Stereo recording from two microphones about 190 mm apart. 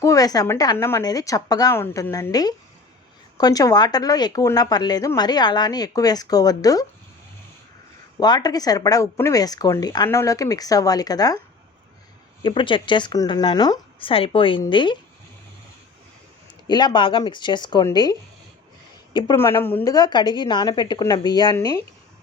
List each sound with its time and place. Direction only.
0.0 s a woman's voice: 20° left (ahead or behind)
8.2 s speech: 20° left (ahead or behind)
12.4 s speech: 25° left (ahead or behind)
16.6 s speech: 20° left (ahead or behind)